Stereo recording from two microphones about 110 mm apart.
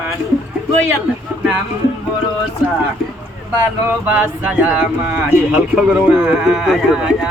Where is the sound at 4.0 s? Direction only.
15° right (ahead or behind).